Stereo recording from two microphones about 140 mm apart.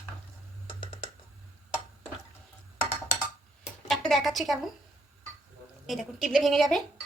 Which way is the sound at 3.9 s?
Centre (ahead or behind).